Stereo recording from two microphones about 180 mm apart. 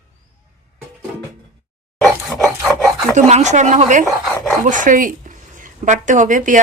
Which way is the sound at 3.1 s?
40° right (ahead or behind).